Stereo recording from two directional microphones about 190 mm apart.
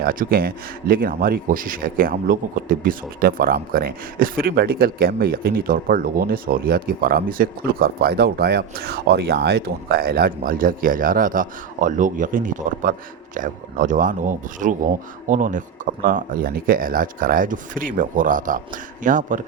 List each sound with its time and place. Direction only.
0.0 s speech: 50° right (ahead or behind)